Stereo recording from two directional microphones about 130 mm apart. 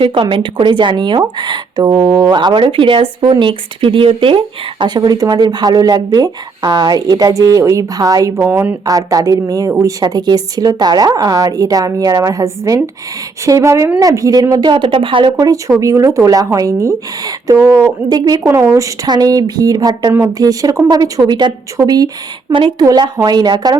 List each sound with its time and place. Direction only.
0.0 s speech: 40° right (ahead or behind)
8.4 s speech: 15° right (ahead or behind)
8.8 s a woman's voice: 25° right (ahead or behind)
15.4 s a woman's voice: 25° right (ahead or behind)